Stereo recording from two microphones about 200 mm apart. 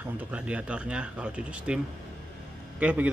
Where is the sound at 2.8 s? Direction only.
5° right (ahead or behind).